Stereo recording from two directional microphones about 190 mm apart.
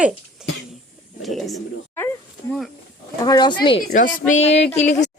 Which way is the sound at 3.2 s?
20° left (ahead or behind).